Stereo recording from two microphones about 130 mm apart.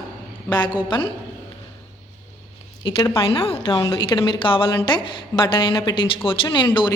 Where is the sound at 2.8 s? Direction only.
40° left (ahead or behind).